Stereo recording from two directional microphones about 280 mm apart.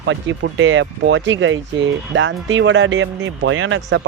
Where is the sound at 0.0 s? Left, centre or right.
Right.